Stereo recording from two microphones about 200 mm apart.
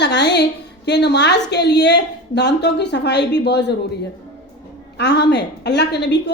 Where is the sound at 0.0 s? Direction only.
55° left (ahead or behind).